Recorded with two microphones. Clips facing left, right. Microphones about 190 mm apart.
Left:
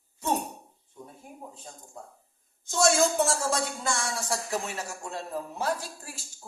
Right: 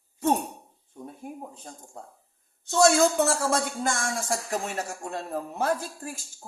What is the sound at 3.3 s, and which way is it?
Speech, 50° right (ahead or behind).